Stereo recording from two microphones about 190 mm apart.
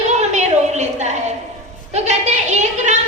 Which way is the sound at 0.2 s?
35° right (ahead or behind).